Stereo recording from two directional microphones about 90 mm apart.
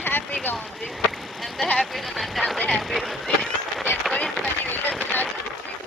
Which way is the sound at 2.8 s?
Centre (ahead or behind).